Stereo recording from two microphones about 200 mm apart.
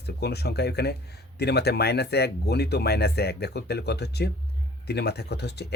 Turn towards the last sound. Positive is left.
turn(degrees=55)  # may be behind; listen again after turning